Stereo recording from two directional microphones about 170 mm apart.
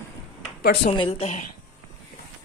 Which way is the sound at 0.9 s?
35° left (ahead or behind).